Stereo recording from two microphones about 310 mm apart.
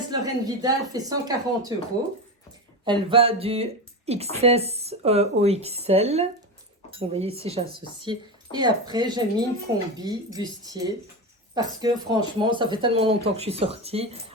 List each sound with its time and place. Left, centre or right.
0.1 s speech: centre
2.8 s speech: centre